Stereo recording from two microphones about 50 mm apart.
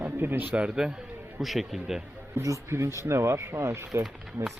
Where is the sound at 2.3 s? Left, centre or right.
Right.